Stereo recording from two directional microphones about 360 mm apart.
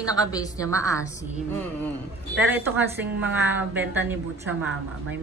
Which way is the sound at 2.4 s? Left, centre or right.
Centre.